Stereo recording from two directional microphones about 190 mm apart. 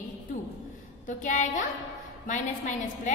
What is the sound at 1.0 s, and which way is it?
A woman's voice, 40° left (ahead or behind).